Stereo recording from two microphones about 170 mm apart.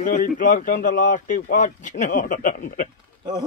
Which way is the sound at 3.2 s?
25° right (ahead or behind).